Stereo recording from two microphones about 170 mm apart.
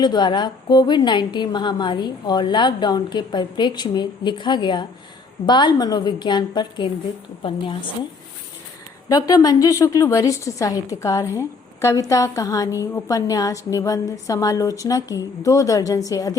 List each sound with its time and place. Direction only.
0.0 s a woman's voice: 25° left (ahead or behind)
9.0 s a woman's voice: 20° left (ahead or behind)